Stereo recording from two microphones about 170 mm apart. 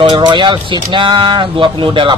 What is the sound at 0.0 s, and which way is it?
Speech, 25° right (ahead or behind).